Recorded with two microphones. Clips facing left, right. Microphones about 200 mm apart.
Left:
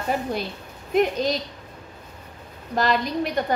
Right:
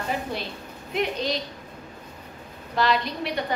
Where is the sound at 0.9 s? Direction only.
45° left (ahead or behind).